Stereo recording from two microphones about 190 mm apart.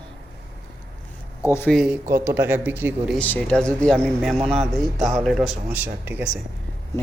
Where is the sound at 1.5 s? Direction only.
10° left (ahead or behind).